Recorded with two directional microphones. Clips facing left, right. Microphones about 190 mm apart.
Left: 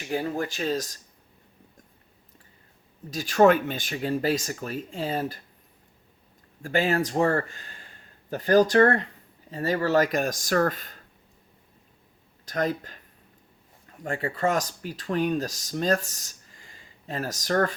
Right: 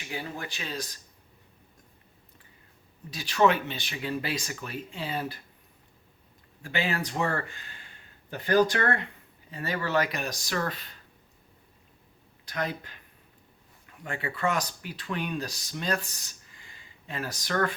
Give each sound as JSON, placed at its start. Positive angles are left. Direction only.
{"t": 0.0, "sound": "speech", "side_deg": 40}
{"t": 3.1, "sound": "speech", "side_deg": 45}
{"t": 6.6, "sound": "speech", "side_deg": 45}
{"t": 12.5, "sound": "speech", "side_deg": 40}